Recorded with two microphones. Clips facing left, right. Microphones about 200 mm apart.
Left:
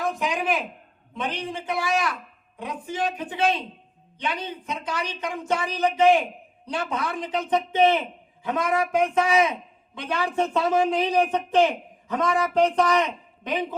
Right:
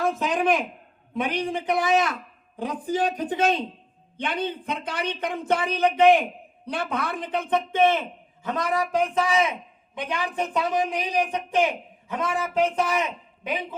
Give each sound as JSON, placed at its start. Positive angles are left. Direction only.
{"t": 0.1, "sound": "a sound", "side_deg": 10}
{"t": 1.1, "sound": "a man's voice", "side_deg": -10}
{"t": 2.6, "sound": "a woman's voice", "side_deg": -35}
{"t": 4.2, "sound": "speech", "side_deg": -55}
{"t": 8.4, "sound": "a woman's voice", "side_deg": -35}
{"t": 9.9, "sound": "a man's voice", "side_deg": -15}